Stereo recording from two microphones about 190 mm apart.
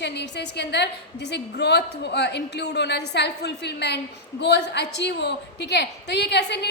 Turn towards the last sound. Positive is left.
turn(degrees=60)  # may be behind; listen again after turning